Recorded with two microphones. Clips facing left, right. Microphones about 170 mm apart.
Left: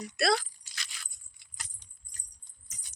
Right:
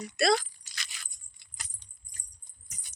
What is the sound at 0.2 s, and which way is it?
Speech, centre (ahead or behind).